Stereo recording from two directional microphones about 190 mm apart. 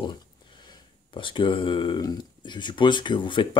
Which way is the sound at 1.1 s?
25° left (ahead or behind).